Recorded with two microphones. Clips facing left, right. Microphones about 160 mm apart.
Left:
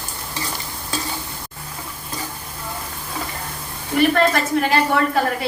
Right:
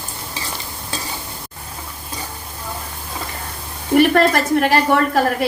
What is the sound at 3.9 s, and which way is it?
A woman's voice, 55° right (ahead or behind).